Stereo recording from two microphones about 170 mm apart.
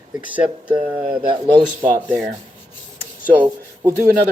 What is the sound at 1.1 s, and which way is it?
Speech, 30° right (ahead or behind).